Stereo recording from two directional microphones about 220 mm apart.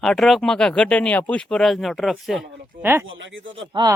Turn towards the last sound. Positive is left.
turn(degrees=-15)  # may be behind; listen again after turning